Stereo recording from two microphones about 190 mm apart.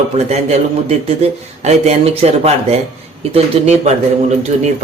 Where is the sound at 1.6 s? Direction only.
35° right (ahead or behind).